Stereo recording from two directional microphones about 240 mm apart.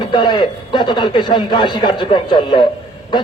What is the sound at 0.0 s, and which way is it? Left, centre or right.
A man's voice, centre.